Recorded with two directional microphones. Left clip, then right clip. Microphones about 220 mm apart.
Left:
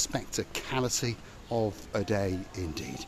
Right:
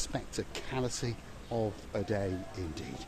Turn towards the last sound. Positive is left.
turn(degrees=30)  # may be behind; listen again after turning